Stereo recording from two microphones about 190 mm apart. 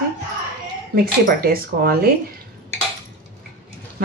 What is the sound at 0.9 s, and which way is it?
A woman's voice, 50° right (ahead or behind).